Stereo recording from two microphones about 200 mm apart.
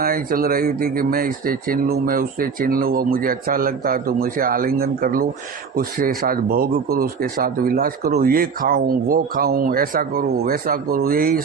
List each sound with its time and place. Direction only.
0.0 s speech: 45° right (ahead or behind)